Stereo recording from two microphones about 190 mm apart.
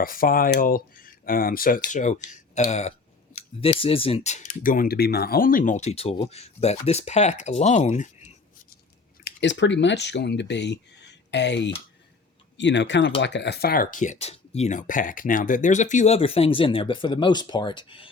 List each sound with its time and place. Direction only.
0.0 s speech: 50° left (ahead or behind)
9.2 s speech: 70° left (ahead or behind); by 18.1 s 25° left (ahead or behind)